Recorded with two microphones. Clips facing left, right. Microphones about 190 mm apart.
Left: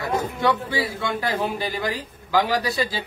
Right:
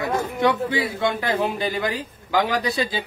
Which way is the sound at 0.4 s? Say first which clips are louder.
Right 4 dB; 20° right (ahead or behind).